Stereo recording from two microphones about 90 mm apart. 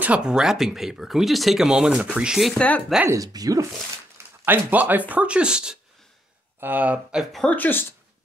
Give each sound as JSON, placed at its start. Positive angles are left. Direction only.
{"t": 0.0, "sound": "speech", "side_deg": -10}
{"t": 3.1, "sound": "speech", "side_deg": -40}
{"t": 4.5, "sound": "speech", "side_deg": -20}
{"t": 6.6, "sound": "speech", "side_deg": -20}
{"t": 7.4, "sound": "speech", "side_deg": 20}